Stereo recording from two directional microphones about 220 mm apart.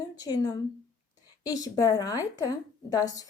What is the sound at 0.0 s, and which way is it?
A woman's voice, 20° left (ahead or behind).